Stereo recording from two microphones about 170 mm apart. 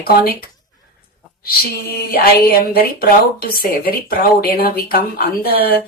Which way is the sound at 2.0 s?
60° left (ahead or behind).